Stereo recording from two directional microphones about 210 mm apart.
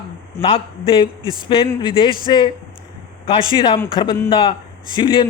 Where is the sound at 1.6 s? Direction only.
25° left (ahead or behind).